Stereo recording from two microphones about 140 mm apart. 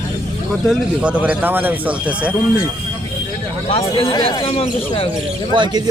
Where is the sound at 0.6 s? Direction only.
5° right (ahead or behind).